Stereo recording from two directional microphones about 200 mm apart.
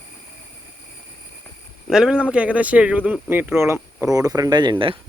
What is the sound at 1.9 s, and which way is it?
Speech, 5° right (ahead or behind).